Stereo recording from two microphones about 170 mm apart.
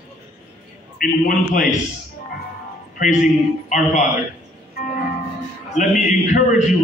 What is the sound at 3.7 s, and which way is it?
Speech, 45° left (ahead or behind).